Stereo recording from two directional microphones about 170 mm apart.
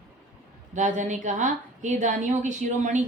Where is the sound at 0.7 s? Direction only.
45° right (ahead or behind).